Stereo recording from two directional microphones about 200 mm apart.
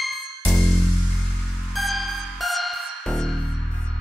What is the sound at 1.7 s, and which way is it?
Music, centre (ahead or behind).